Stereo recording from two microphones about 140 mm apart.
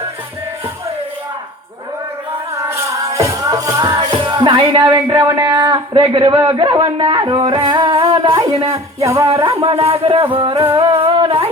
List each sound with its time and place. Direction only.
2.6 s music: 20° right (ahead or behind); by 6.4 s 40° right (ahead or behind)
6.5 s speech: 35° right (ahead or behind)
8.5 s speech: 45° right (ahead or behind)
9.0 s music: 20° right (ahead or behind)
9.4 s speech: 40° right (ahead or behind)
10.8 s music: 40° right (ahead or behind)